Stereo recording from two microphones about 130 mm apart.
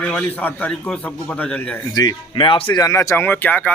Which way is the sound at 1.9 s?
30° left (ahead or behind).